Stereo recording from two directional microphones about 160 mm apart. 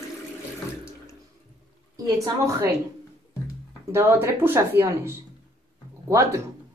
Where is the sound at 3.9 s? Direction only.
15° right (ahead or behind).